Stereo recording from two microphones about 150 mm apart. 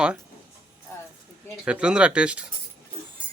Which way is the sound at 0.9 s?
15° left (ahead or behind).